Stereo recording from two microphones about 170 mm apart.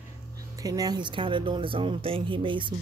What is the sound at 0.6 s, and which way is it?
Speech, 20° right (ahead or behind).